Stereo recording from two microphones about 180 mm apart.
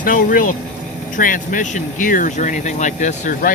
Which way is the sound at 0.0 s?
50° left (ahead or behind).